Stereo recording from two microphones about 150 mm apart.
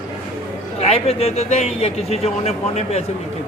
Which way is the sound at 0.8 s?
45° left (ahead or behind).